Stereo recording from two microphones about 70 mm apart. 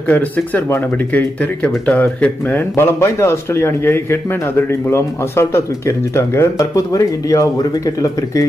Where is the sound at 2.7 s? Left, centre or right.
Left.